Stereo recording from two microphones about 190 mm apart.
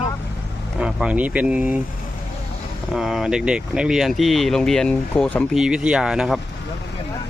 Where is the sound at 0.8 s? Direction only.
5° right (ahead or behind).